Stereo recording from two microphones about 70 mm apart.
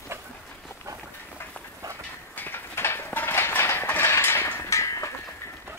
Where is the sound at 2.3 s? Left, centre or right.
Left.